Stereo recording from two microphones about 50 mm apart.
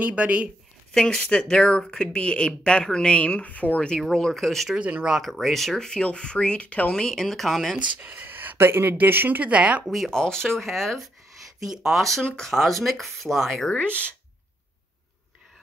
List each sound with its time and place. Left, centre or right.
0.0 s speech: right
1.0 s speech: centre
4.0 s speech: centre
4.7 s speech: right
5.2 s speech: centre
5.8 s speech: centre
6.9 s speech: centre
8.0 s speech: right
9.4 s speech: right
9.8 s speech: centre
10.1 s speech: centre
12.3 s speech: centre
12.5 s speech: centre
13.7 s speech: left